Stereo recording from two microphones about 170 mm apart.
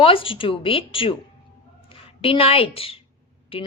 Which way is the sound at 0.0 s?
30° left (ahead or behind).